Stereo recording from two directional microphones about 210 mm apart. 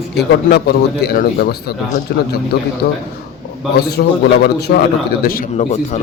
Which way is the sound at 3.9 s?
50° left (ahead or behind).